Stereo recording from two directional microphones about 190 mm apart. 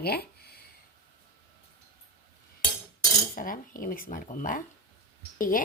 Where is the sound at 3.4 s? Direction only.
45° left (ahead or behind).